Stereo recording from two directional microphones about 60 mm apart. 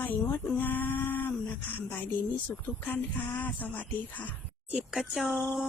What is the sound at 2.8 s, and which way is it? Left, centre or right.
Speech, left.